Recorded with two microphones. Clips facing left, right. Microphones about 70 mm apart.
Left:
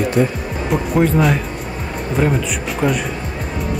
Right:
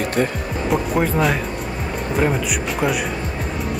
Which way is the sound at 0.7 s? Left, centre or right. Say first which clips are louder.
Left 3 dB; centre.